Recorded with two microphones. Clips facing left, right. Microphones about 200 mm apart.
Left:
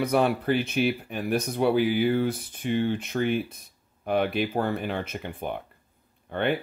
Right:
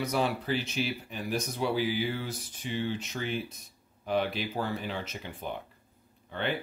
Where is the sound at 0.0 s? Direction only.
55° left (ahead or behind).